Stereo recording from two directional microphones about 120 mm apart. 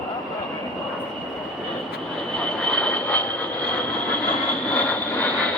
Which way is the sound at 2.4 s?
10° left (ahead or behind).